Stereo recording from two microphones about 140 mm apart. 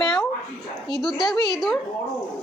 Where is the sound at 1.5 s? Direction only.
Centre (ahead or behind).